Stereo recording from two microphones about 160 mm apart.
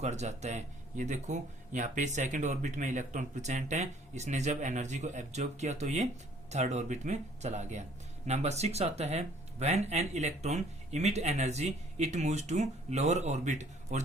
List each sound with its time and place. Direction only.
0.0 s speech: 45° right (ahead or behind)